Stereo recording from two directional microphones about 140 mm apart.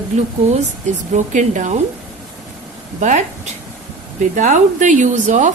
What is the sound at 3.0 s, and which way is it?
A woman's voice, 55° right (ahead or behind).